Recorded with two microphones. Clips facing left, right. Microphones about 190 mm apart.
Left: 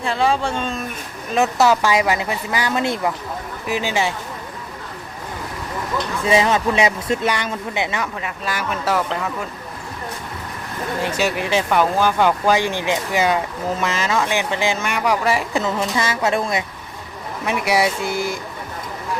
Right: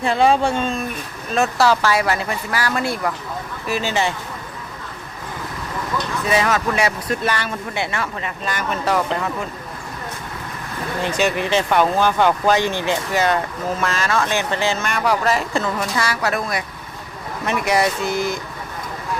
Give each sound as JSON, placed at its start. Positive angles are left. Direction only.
{"t": 0.1, "sound": "speech", "side_deg": -15}
{"t": 1.3, "sound": "speech", "side_deg": 20}
{"t": 6.2, "sound": "speech", "side_deg": 25}
{"t": 8.2, "sound": "speech", "side_deg": 5}
{"t": 11.1, "sound": "speech", "side_deg": 5}
{"t": 17.4, "sound": "speech", "side_deg": 10}